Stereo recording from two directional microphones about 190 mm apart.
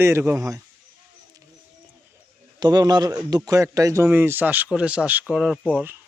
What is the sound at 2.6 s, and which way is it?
A man's voice, 20° right (ahead or behind).